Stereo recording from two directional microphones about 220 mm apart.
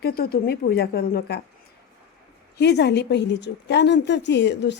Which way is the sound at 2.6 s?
50° left (ahead or behind).